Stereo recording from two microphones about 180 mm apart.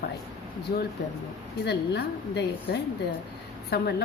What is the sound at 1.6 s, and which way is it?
A woman's voice, 70° left (ahead or behind).